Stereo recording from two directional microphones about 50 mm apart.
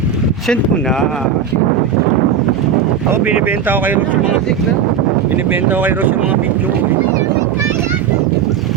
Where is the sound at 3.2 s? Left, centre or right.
Right.